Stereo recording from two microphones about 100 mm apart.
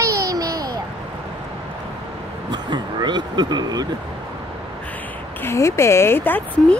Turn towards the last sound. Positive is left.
turn(degrees=20)  # may be behind; listen again after turning